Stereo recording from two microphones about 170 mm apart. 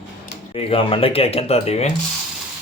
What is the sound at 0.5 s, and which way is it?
Speech, 35° left (ahead or behind).